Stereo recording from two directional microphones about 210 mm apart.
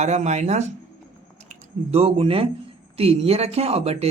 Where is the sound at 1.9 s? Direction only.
30° right (ahead or behind).